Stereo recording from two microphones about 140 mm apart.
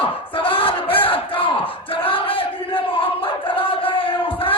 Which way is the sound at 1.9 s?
40° left (ahead or behind).